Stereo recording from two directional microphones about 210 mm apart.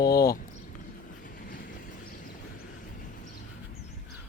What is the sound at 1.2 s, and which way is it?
Vehicle, 40° left (ahead or behind).